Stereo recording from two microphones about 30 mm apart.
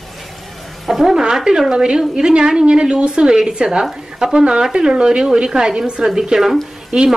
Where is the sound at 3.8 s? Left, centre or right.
Centre.